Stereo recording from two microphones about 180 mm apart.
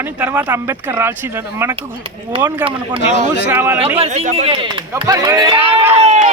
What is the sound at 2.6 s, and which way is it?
Speech, 35° right (ahead or behind).